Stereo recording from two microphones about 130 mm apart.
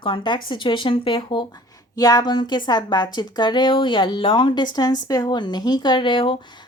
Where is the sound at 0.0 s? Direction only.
35° left (ahead or behind).